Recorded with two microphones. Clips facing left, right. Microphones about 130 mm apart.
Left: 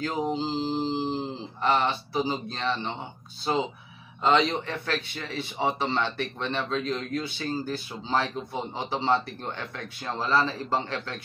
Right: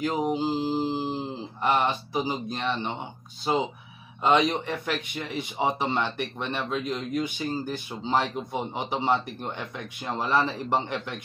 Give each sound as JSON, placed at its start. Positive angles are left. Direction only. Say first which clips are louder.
{"t": 0.0, "sound": "speech", "louder": "right 2 dB", "side_deg": -15}
{"t": 4.2, "sound": "speech", "louder": "right 1 dB", "side_deg": -15}